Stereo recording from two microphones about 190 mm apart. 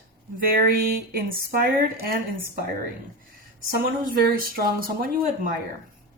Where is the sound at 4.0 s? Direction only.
50° right (ahead or behind).